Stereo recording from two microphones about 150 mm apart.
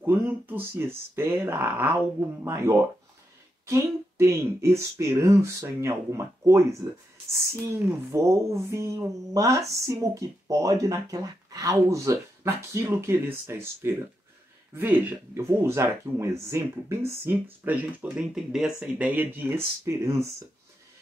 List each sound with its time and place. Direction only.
0.0 s speech: 15° right (ahead or behind)